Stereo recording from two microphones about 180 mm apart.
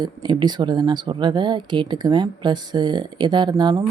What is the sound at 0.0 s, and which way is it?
Speech, 25° right (ahead or behind).